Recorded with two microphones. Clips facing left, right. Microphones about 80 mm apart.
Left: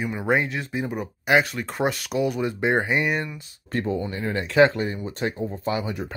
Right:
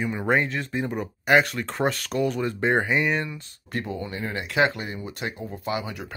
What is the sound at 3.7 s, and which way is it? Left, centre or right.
Speech, left.